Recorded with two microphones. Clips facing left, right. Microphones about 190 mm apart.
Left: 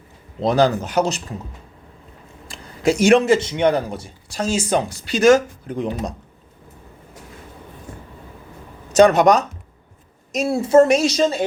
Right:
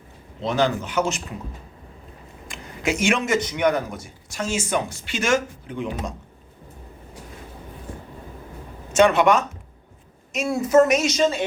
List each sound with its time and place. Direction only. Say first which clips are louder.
0.4 s a man's voice: left 5 dB; 35° left (ahead or behind)
2.5 s a man's voice: left 6 dB; 35° left (ahead or behind)
8.9 s a man's voice: left 4 dB; 40° left (ahead or behind)